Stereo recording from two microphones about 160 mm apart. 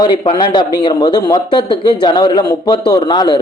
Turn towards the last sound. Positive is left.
turn(degrees=25)  # may be behind; listen again after turning